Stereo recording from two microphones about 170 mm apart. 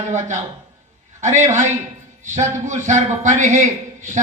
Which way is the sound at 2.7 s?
45° right (ahead or behind).